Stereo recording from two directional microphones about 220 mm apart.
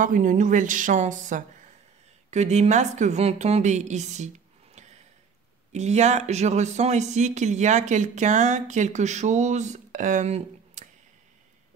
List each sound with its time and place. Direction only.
0.0 s speech: 35° right (ahead or behind)